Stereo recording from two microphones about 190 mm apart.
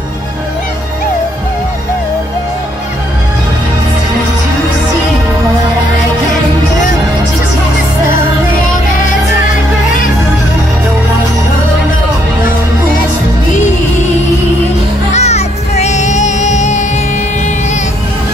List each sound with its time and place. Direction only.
15.1 s music: 35° left (ahead or behind)